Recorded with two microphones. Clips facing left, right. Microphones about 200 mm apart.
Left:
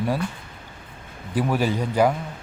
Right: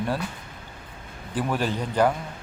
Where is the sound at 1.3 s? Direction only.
10° left (ahead or behind).